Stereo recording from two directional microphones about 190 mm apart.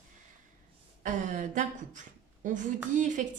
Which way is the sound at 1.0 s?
40° right (ahead or behind).